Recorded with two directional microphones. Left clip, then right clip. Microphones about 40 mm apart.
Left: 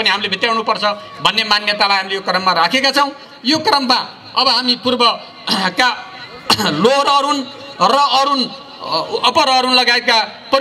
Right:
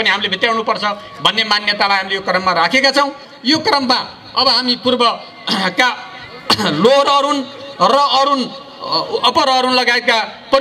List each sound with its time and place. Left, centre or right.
0.0 s a man's voice: left